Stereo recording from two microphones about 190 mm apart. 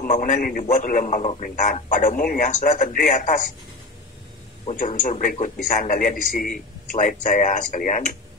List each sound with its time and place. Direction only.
0.0 s a man's voice: 45° left (ahead or behind)
4.6 s a man's voice: 45° left (ahead or behind)